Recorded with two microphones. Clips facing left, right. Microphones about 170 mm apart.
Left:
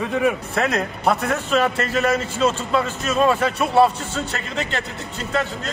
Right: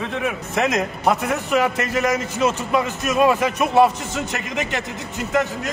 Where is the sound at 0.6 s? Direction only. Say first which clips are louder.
Right 1 dB; 20° right (ahead or behind).